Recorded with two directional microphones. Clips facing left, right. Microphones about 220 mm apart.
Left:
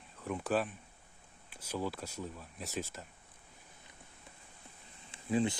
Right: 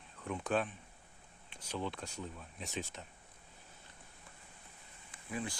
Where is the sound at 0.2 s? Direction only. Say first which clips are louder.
Left 2 dB; 5° left (ahead or behind).